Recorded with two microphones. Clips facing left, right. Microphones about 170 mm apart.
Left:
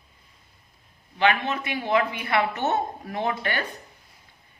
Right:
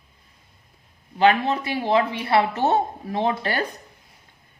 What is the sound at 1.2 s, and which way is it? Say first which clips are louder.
A woman's voice: right 5 dB; 35° right (ahead or behind).